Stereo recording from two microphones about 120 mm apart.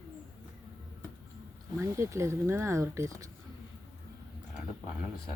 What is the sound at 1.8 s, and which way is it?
Speech, 25° right (ahead or behind).